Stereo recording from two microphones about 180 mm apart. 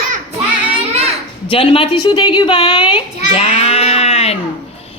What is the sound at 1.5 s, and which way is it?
A child's voice, 30° left (ahead or behind).